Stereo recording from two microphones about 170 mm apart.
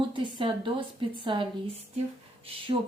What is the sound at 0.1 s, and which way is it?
A woman's voice, 30° right (ahead or behind).